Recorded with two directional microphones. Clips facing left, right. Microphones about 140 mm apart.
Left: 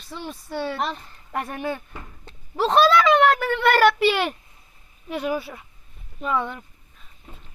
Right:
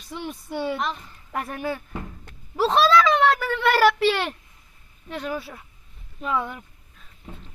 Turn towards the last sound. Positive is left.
turn(degrees=-5)  # may be behind; listen again after turning